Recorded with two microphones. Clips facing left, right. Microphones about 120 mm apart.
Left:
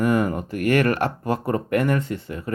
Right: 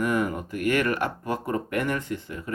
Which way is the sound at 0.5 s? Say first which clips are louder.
Left 4 dB; 60° left (ahead or behind).